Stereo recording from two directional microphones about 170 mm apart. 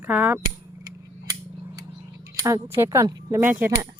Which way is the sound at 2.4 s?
20° right (ahead or behind).